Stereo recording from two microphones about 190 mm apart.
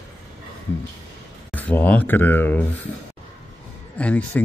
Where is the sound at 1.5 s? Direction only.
10° left (ahead or behind).